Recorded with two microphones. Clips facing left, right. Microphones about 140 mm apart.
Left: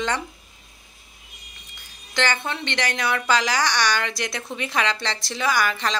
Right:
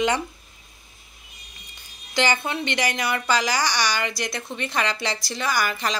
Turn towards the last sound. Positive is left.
turn(degrees=-5)  # may be behind; listen again after turning